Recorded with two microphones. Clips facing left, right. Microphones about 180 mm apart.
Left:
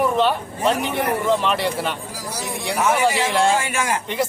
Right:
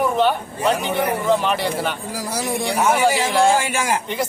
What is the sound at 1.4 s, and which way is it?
Speech, centre (ahead or behind).